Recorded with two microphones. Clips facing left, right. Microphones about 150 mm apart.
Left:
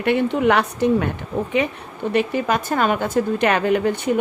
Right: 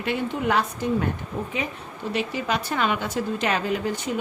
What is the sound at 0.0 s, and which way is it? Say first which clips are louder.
A woman's voice: left 8 dB; 65° left (ahead or behind).